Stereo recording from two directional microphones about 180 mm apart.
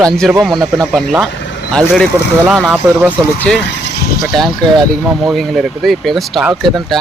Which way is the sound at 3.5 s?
5° left (ahead or behind).